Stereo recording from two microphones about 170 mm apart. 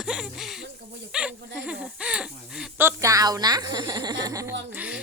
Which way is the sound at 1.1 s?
5° right (ahead or behind).